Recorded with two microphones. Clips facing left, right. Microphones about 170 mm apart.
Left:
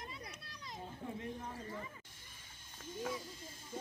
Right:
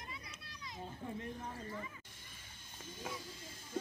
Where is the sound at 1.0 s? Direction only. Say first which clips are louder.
Even; 5° left (ahead or behind).